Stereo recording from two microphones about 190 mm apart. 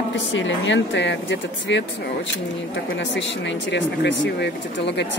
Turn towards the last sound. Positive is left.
turn(degrees=70)  # may be behind; listen again after turning